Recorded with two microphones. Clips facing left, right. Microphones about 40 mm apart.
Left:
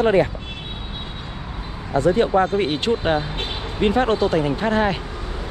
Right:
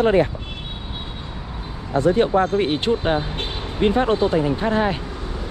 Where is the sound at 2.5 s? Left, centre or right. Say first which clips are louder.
Right 1 dB; left.